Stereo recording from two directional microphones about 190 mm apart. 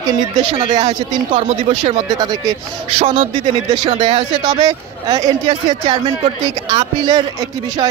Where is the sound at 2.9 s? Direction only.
30° right (ahead or behind).